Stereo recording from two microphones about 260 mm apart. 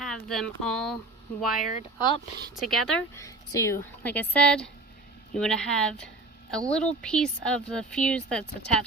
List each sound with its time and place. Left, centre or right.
0.0 s a woman's voice: centre
1.7 s speech: left
2.6 s a woman's voice: centre